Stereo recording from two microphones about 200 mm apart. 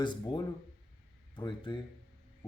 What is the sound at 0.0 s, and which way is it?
Speech, 20° left (ahead or behind).